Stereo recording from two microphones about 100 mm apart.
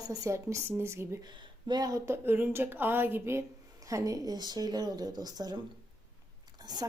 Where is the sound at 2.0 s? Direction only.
20° right (ahead or behind).